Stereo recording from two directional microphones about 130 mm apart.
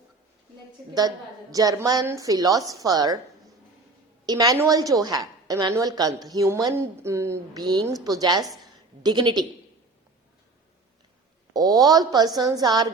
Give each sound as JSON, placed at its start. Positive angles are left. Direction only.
{"t": 0.9, "sound": "a woman's voice", "side_deg": -30}
{"t": 4.3, "sound": "a woman's voice", "side_deg": -30}
{"t": 7.6, "sound": "a woman's voice", "side_deg": -35}
{"t": 11.5, "sound": "a woman's voice", "side_deg": -30}